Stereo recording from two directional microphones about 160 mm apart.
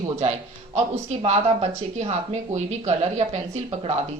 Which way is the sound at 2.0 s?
45° right (ahead or behind).